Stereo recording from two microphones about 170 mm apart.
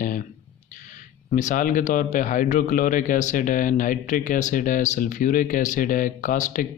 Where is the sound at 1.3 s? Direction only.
50° left (ahead or behind).